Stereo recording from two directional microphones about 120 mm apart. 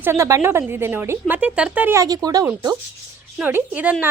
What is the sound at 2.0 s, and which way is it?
Speech, 30° right (ahead or behind).